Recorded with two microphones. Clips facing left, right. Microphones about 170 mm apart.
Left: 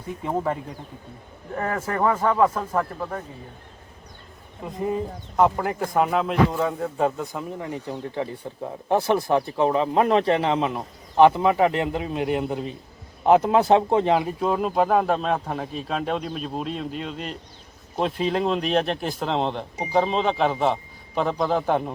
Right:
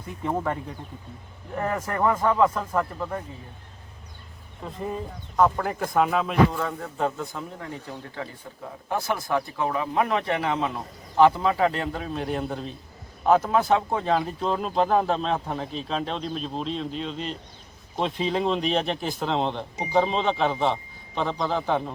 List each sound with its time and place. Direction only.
0.2 s speech: 5° left (ahead or behind)
4.6 s speech: 15° left (ahead or behind); by 6.3 s centre (ahead or behind)
6.5 s speech: 15° left (ahead or behind)
8.9 s speech: 30° left (ahead or behind)
13.6 s speech: 35° left (ahead or behind)
14.0 s speech: 15° left (ahead or behind)